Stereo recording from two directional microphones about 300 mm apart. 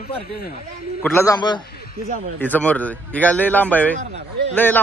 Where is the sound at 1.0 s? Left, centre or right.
Centre.